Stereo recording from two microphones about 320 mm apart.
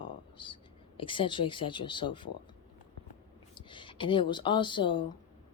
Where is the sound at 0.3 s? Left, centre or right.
Centre.